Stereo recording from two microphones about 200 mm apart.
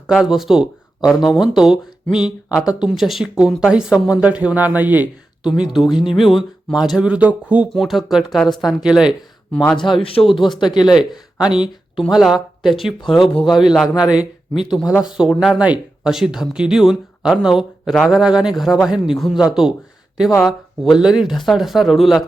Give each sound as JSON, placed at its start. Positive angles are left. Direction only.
{"t": 0.1, "sound": "speech", "side_deg": 0}
{"t": 9.7, "sound": "a man's voice", "side_deg": 25}
{"t": 10.9, "sound": "speech", "side_deg": -5}
{"t": 13.3, "sound": "a man's voice", "side_deg": 25}
{"t": 14.0, "sound": "speech", "side_deg": -5}